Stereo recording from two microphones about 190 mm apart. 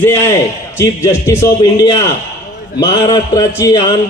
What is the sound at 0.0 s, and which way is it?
A man's voice, 15° left (ahead or behind).